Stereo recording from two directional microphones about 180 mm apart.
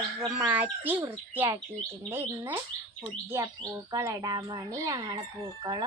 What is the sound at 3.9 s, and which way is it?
Speech, 20° right (ahead or behind).